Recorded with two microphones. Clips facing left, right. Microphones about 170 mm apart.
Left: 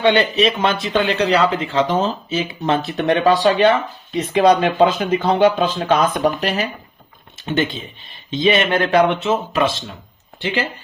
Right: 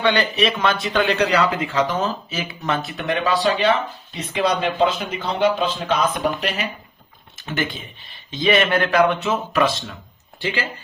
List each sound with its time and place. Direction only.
0.0 s speech: 25° left (ahead or behind); by 6.7 s 40° left (ahead or behind)
7.3 s speech: 25° left (ahead or behind)